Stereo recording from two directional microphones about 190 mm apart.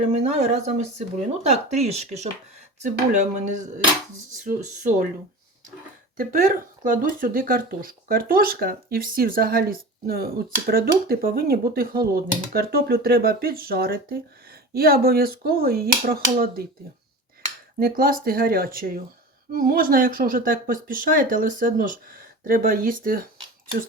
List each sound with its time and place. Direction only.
0.1 s speech: 35° right (ahead or behind)
6.1 s speech: 45° right (ahead or behind)
17.7 s speech: 50° right (ahead or behind)